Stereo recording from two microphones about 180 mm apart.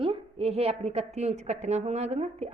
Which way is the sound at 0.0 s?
30° right (ahead or behind).